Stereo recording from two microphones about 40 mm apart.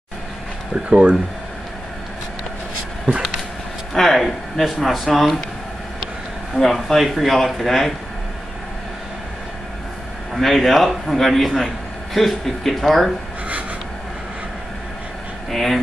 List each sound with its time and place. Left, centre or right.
0.8 s speech: right
3.9 s a man's voice: centre
6.5 s a man's voice: centre
10.3 s a man's voice: centre
15.5 s a man's voice: centre